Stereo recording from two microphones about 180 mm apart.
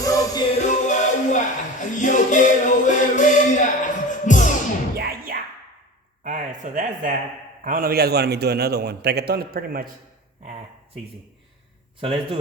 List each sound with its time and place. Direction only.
0.0 s music: 20° left (ahead or behind)
0.6 s music: 40° left (ahead or behind)
4.9 s music: 60° right (ahead or behind)
6.2 s a sound: 45° right (ahead or behind)
7.6 s a man's voice: 50° right (ahead or behind)
11.9 s speech: 30° right (ahead or behind)